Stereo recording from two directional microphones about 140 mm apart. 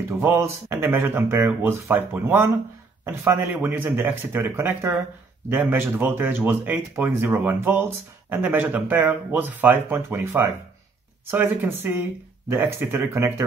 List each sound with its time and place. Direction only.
0.2 s speech: 15° right (ahead or behind)